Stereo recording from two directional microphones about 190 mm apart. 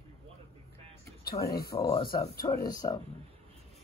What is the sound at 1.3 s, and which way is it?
Speech, 20° left (ahead or behind).